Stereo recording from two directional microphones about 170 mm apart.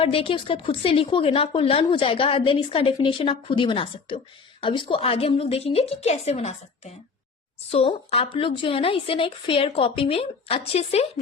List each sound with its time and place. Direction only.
0.0 s a woman's voice: 35° left (ahead or behind)